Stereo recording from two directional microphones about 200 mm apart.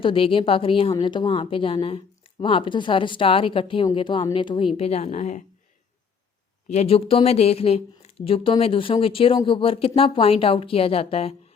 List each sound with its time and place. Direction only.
0.0 s a woman's voice: 25° left (ahead or behind)
6.7 s a woman's voice: 30° left (ahead or behind)